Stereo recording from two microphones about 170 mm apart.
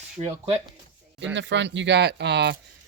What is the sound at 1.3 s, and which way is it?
Speech, 90° right.